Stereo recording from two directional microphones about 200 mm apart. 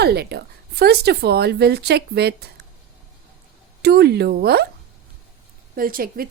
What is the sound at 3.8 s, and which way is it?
Speech, 55° right (ahead or behind).